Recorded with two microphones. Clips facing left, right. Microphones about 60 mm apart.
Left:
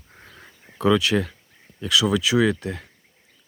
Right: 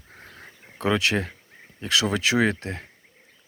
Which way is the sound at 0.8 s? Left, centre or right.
Right.